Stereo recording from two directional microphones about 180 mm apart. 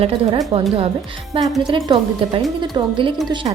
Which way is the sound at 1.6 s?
25° right (ahead or behind).